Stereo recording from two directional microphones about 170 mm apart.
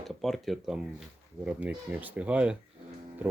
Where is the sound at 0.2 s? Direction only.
Centre (ahead or behind).